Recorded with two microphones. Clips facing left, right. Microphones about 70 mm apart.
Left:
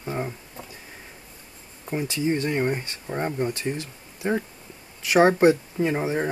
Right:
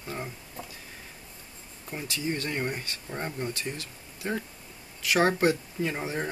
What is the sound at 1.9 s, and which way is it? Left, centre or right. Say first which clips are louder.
Speech: left 7 dB; left.